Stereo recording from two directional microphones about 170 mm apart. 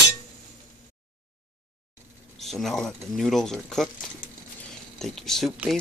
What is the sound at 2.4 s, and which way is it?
Speech, centre (ahead or behind).